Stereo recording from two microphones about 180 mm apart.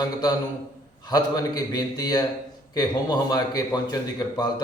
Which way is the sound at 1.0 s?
20° left (ahead or behind).